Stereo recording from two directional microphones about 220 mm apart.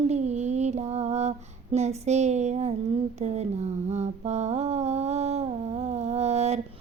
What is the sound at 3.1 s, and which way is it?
Mantra, 30° right (ahead or behind).